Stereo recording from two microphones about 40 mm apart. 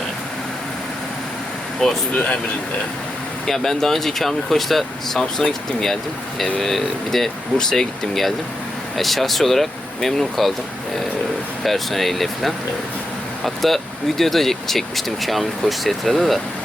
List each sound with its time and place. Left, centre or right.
1.8 s speech: centre
3.4 s speech: centre
11.6 s speech: centre